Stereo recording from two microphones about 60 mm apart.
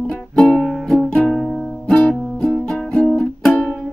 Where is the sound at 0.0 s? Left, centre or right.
Centre.